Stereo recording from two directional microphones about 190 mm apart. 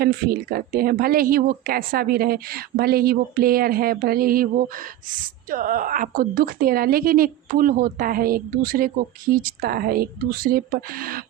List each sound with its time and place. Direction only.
0.0 s a woman's voice: 50° right (ahead or behind)
5.5 s a woman's voice: 45° right (ahead or behind)